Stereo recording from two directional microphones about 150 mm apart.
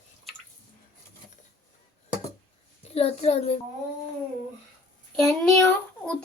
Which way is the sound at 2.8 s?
45° left (ahead or behind).